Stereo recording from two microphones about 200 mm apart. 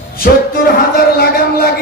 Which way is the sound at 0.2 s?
50° left (ahead or behind).